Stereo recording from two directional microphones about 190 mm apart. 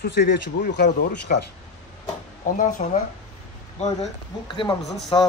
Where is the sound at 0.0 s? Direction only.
45° left (ahead or behind).